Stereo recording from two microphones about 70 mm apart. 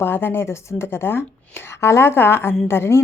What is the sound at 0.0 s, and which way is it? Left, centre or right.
A woman's voice, left.